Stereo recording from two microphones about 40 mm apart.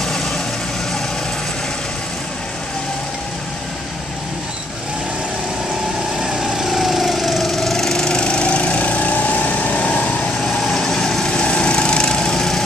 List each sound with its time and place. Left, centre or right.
6.1 s lawn mower: centre; by 10.1 s left
10.4 s vehicle: centre
11.4 s lawn mower: left